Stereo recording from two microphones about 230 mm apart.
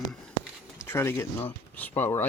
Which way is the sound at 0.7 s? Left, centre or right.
Centre.